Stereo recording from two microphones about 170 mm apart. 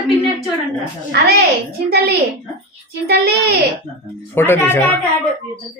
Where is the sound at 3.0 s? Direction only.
65° right (ahead or behind).